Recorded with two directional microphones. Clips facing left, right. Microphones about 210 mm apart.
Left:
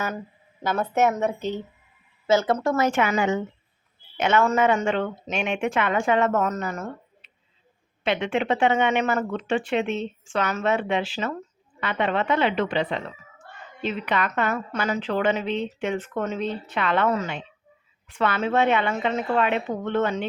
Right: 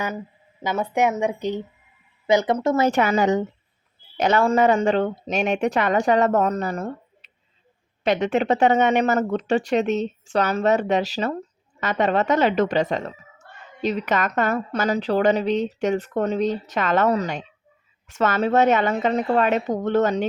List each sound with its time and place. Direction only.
0.6 s a woman's voice: 15° right (ahead or behind)
2.8 s speech: 35° right (ahead or behind)